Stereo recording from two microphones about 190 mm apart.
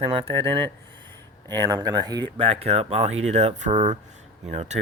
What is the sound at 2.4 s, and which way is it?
Speech, 30° right (ahead or behind).